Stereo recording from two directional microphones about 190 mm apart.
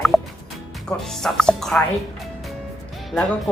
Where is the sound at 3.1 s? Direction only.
Centre (ahead or behind).